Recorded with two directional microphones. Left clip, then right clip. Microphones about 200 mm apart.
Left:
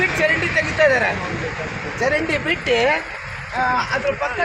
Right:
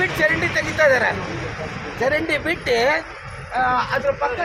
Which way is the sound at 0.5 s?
15° left (ahead or behind).